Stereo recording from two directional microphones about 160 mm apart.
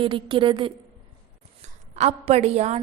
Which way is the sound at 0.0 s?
30° right (ahead or behind).